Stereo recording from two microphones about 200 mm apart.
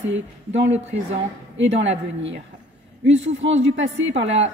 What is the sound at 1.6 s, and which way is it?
A woman's voice, 65° right (ahead or behind).